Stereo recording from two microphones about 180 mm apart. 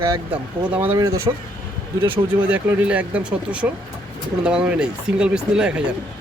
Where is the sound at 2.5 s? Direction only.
5° right (ahead or behind).